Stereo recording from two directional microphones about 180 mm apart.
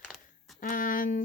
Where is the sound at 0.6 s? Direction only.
50° left (ahead or behind).